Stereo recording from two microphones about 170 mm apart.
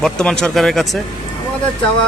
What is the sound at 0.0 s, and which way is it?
Speech, 5° left (ahead or behind).